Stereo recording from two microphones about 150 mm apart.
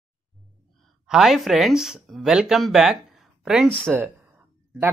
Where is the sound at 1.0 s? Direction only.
5° right (ahead or behind).